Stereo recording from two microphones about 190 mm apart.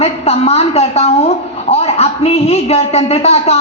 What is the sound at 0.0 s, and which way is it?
A woman's voice, 35° left (ahead or behind).